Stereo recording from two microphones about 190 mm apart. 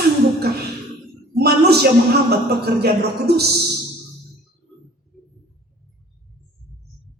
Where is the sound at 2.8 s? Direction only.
60° right (ahead or behind).